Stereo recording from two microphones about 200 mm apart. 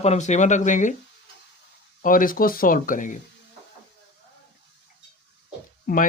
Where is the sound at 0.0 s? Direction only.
35° left (ahead or behind).